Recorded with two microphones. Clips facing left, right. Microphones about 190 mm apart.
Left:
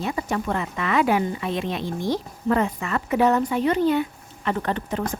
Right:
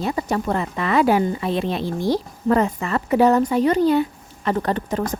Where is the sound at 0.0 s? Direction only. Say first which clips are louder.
Right 3 dB; 35° right (ahead or behind).